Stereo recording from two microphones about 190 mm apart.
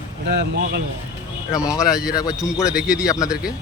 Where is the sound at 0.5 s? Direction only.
60° right (ahead or behind).